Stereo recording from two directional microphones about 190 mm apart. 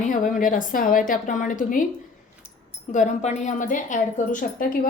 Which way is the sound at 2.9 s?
40° left (ahead or behind).